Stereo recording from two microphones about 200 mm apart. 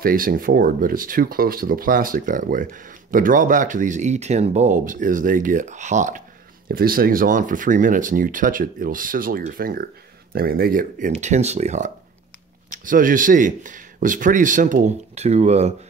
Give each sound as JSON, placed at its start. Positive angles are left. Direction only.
{"t": 0.0, "sound": "speech", "side_deg": -45}